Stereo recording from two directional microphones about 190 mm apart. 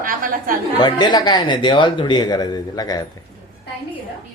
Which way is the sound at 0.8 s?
25° left (ahead or behind).